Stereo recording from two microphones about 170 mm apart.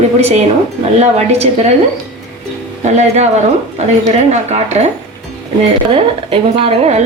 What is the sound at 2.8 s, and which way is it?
A woman's voice, 45° right (ahead or behind).